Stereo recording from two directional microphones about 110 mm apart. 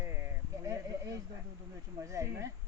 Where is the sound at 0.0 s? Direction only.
20° right (ahead or behind).